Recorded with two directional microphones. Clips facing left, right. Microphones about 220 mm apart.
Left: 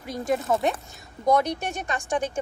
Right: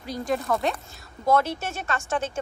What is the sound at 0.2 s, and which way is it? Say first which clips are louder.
Speech: left 2 dB; 20° left (ahead or behind).